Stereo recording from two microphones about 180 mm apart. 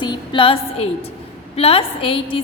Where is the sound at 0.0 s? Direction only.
25° left (ahead or behind).